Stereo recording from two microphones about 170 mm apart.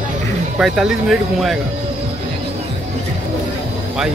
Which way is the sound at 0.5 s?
Centre (ahead or behind).